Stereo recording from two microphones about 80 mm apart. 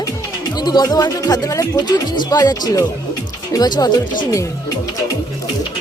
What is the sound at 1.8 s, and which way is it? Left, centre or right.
Speech, left.